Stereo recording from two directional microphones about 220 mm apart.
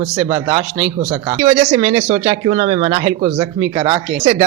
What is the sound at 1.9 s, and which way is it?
A man's voice, 30° right (ahead or behind).